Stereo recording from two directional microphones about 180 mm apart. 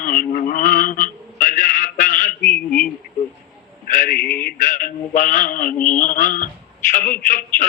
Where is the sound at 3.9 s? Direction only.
50° left (ahead or behind).